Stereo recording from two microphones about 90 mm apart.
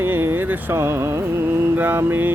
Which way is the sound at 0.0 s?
25° right (ahead or behind).